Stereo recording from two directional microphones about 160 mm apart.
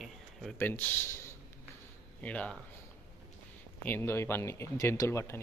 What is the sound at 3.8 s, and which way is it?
Speech, 15° left (ahead or behind).